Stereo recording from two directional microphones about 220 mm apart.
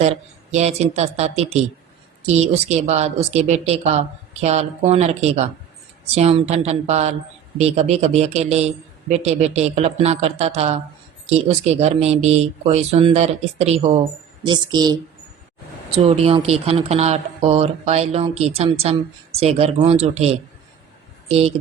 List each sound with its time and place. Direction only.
0.5 s speech: 30° right (ahead or behind)
16.0 s speech: 25° right (ahead or behind)